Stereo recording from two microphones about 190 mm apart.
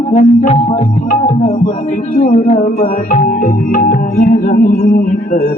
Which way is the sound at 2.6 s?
45° left (ahead or behind).